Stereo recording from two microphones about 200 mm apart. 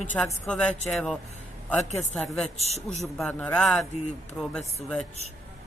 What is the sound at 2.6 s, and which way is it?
Speech, 35° left (ahead or behind).